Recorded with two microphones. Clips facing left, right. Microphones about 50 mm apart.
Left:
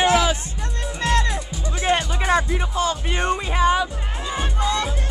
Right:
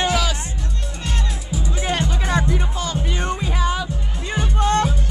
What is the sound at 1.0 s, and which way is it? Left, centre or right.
Music, left.